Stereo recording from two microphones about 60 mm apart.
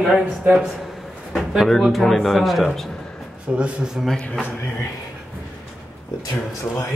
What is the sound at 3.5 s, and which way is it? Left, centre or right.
Speech, centre.